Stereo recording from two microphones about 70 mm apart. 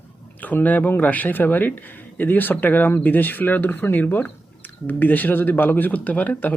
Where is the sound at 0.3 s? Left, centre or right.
Left.